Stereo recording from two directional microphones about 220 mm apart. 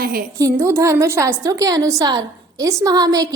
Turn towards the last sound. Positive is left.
turn(degrees=-15)  # may be behind; listen again after turning